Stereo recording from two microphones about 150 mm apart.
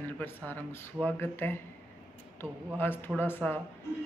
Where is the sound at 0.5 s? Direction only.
15° left (ahead or behind).